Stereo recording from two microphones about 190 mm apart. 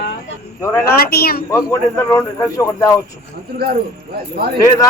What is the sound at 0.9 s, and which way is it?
Speech, 55° left (ahead or behind).